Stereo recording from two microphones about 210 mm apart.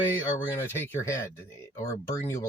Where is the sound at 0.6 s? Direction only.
10° left (ahead or behind).